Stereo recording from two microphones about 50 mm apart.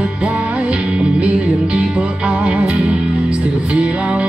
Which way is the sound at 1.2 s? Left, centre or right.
Centre.